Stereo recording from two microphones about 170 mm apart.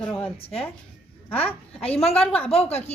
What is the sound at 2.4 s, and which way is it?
Speech, 35° left (ahead or behind).